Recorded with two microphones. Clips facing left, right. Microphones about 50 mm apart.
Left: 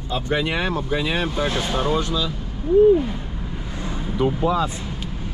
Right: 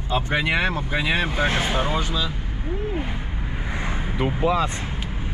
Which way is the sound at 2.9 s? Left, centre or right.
Right.